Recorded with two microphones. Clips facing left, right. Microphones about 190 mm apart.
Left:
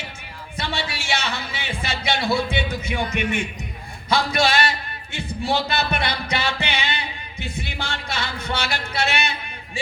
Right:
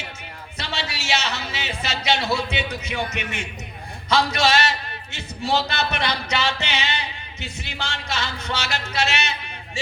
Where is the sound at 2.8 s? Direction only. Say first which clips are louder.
Left 4 dB; 55° left (ahead or behind).